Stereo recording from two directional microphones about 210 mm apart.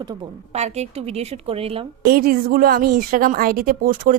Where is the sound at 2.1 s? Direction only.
45° right (ahead or behind).